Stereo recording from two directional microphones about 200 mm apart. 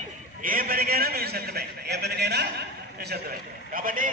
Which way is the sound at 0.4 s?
45° right (ahead or behind).